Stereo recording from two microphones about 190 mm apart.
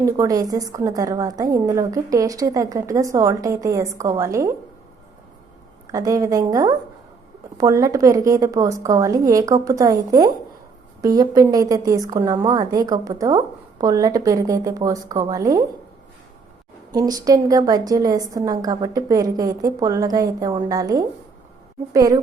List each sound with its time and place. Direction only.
0.0 s a woman's voice: 15° right (ahead or behind)
5.9 s a woman's voice: 20° right (ahead or behind)
16.9 s a woman's voice: 20° right (ahead or behind)